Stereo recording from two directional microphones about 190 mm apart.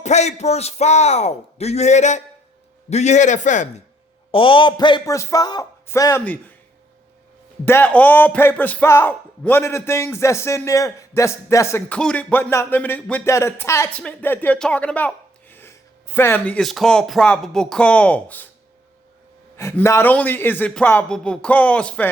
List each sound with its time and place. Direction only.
0.0 s a man's voice: 35° left (ahead or behind)
4.3 s a man's voice: 25° left (ahead or behind); by 6.5 s 10° left (ahead or behind)
7.6 s speech: 10° left (ahead or behind)
19.5 s speech: 15° left (ahead or behind)